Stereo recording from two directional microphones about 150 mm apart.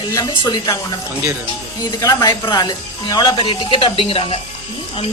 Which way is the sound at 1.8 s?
20° left (ahead or behind).